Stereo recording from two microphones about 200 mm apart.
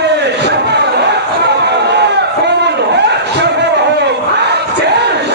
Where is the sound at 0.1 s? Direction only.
60° right (ahead or behind).